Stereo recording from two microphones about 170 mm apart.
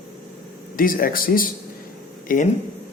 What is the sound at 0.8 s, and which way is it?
Speech, 55° left (ahead or behind).